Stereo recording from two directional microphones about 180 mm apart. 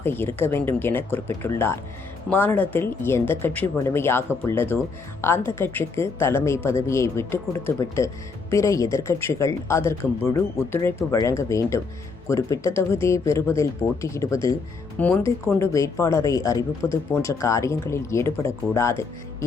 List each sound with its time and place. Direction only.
0.0 s speech: 10° left (ahead or behind)